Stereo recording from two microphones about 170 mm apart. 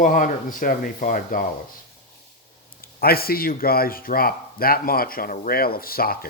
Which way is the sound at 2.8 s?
65° left (ahead or behind).